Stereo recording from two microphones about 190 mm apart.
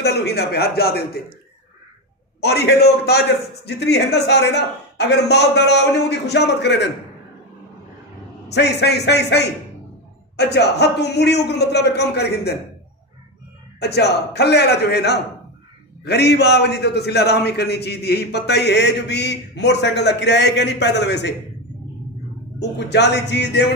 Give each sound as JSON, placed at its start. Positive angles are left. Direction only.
{"t": 0.0, "sound": "a man's voice", "side_deg": 60}
{"t": 2.4, "sound": "a man's voice", "side_deg": 60}
{"t": 8.5, "sound": "a man's voice", "side_deg": 60}
{"t": 13.7, "sound": "a man's voice", "side_deg": 60}
{"t": 22.6, "sound": "a man's voice", "side_deg": 65}